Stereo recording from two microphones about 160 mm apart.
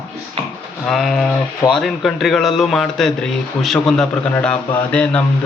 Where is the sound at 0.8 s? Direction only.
Centre (ahead or behind).